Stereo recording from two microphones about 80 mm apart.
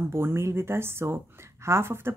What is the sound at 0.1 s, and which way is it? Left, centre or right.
A woman's voice, right.